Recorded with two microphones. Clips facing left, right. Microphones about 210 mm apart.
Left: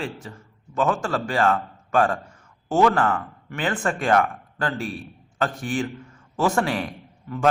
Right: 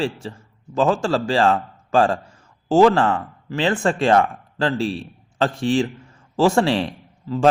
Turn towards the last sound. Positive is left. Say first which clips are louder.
# right 5 dB
turn(degrees=-30)  # may be behind; listen again after turning